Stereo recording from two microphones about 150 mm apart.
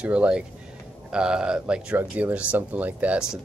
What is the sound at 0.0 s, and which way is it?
Speech, 10° right (ahead or behind).